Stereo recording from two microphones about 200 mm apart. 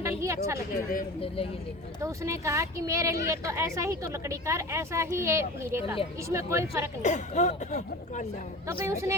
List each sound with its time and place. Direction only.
0.0 s a woman's voice: 15° right (ahead or behind)
2.0 s speech: 15° right (ahead or behind)
7.0 s speech: 35° left (ahead or behind)
8.6 s speech: 15° right (ahead or behind)